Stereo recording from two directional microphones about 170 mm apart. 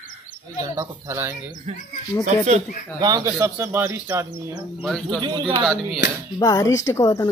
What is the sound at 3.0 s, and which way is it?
Speech, 25° right (ahead or behind).